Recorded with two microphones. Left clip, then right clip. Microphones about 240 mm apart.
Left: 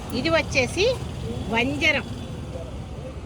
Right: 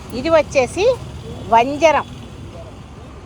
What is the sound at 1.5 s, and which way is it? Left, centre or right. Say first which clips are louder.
Speech: right 9 dB; right.